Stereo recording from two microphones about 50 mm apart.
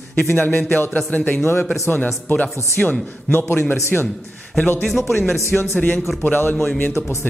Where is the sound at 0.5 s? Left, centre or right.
Left.